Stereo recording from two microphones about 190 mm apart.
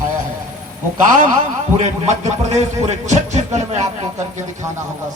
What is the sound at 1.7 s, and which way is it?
A man's voice, 40° right (ahead or behind).